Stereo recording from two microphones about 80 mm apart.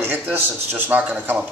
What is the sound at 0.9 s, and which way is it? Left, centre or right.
Speech, right.